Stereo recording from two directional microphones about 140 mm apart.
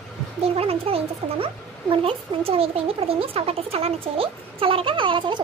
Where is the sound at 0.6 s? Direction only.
45° right (ahead or behind).